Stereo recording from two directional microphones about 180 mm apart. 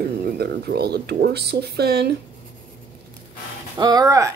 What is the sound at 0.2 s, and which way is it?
Speech, 60° right (ahead or behind).